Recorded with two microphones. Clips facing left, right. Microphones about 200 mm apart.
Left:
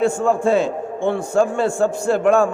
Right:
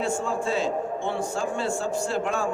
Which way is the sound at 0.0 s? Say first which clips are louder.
Left 9 dB; 55° left (ahead or behind).